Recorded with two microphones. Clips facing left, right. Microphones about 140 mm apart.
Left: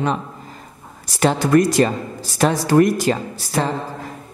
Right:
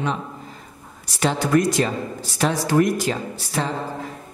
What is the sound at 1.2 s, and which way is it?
A man's voice, 50° left (ahead or behind).